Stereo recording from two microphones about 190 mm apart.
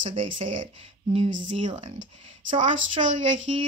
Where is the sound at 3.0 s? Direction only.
30° right (ahead or behind).